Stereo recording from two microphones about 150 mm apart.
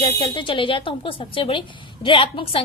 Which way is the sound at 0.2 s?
35° left (ahead or behind).